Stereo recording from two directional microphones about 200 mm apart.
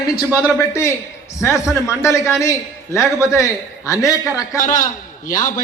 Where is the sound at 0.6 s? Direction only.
15° left (ahead or behind).